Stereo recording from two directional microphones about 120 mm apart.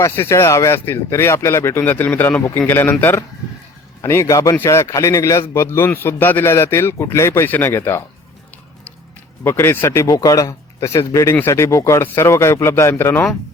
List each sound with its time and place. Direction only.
0.0 s a man's voice: 25° left (ahead or behind)
9.4 s a man's voice: 20° left (ahead or behind)